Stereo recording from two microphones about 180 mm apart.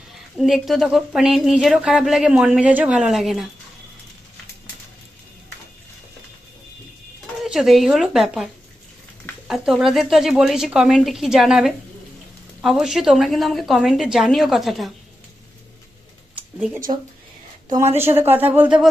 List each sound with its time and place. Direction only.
0.3 s speech: centre (ahead or behind)
7.4 s speech: centre (ahead or behind)
9.5 s speech: centre (ahead or behind)
16.7 s speech: 20° right (ahead or behind)